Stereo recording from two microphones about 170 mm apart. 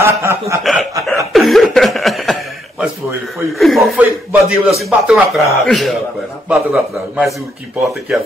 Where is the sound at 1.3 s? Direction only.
Centre (ahead or behind).